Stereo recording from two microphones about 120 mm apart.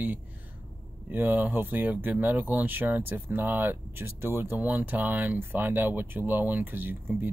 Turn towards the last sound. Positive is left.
turn(degrees=-15)  # may be behind; listen again after turning